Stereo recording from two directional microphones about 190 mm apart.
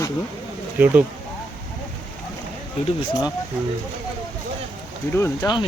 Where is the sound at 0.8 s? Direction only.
10° right (ahead or behind).